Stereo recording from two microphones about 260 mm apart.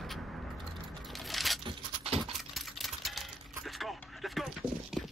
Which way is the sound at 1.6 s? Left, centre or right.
Right.